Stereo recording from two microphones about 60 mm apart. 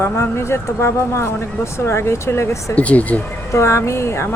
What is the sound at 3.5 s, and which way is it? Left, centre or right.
Speech, left.